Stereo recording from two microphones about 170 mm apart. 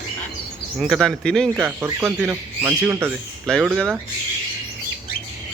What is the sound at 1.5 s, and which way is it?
Speech, 15° right (ahead or behind).